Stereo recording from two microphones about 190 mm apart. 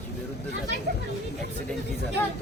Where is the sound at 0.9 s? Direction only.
55° right (ahead or behind).